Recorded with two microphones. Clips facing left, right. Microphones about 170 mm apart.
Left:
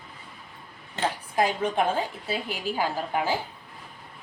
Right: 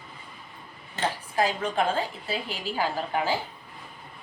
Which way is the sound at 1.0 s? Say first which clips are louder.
Left 1 dB; 15° left (ahead or behind).